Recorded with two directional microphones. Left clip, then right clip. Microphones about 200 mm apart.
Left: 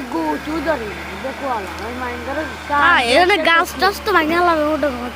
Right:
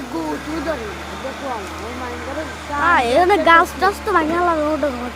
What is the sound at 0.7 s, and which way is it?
Speech, 25° left (ahead or behind).